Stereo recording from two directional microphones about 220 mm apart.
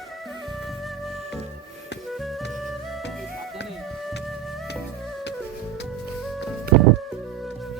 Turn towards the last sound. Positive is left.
turn(degrees=0)  # may be behind; listen again after turning